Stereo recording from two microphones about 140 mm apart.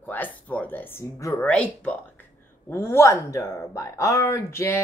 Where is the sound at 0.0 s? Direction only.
10° left (ahead or behind).